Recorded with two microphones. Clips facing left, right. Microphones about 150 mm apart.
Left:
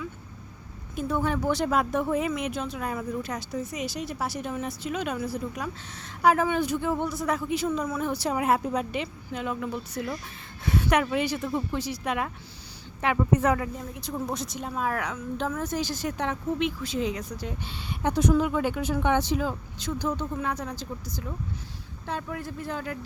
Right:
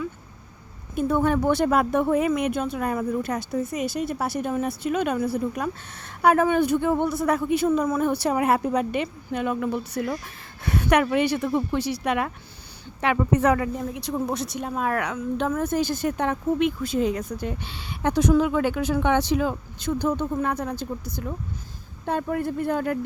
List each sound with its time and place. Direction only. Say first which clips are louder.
0.9 s a woman's voice: right 6 dB; 55° right (ahead or behind)